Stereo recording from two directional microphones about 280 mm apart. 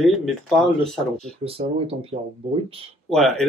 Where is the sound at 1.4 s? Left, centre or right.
Right.